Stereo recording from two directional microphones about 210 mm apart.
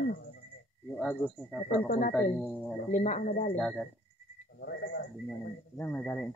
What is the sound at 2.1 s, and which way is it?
Speech, 5° left (ahead or behind).